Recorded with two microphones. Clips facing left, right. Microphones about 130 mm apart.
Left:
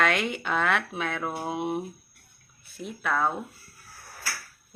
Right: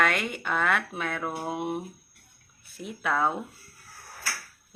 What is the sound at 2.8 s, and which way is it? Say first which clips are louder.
Speech: even; 15° right (ahead or behind).